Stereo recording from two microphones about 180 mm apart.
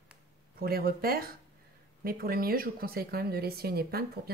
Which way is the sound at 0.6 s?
55° right (ahead or behind).